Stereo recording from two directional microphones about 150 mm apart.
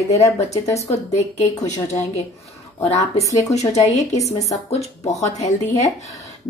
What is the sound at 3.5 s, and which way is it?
Speech, 50° left (ahead or behind).